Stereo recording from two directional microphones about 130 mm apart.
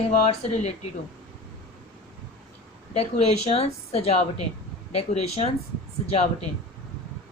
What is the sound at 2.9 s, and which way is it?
Speech, 55° left (ahead or behind).